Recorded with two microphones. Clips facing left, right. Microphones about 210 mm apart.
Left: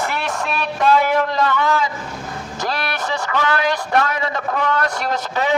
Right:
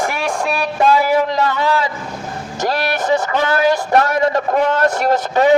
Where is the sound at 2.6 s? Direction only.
40° right (ahead or behind).